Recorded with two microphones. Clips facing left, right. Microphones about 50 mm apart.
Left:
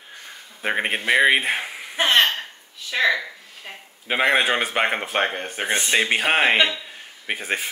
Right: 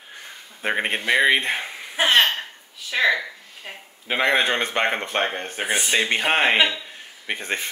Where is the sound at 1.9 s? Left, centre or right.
Centre.